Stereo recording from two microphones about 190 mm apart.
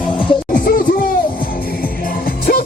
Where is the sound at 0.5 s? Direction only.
50° left (ahead or behind).